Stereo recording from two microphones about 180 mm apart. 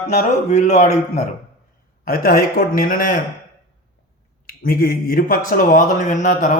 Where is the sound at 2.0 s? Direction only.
50° left (ahead or behind).